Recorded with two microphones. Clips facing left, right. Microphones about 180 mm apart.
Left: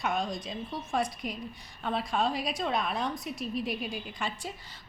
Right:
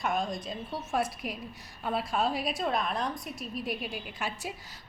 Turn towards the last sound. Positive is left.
turn(degrees=-5)  # may be behind; listen again after turning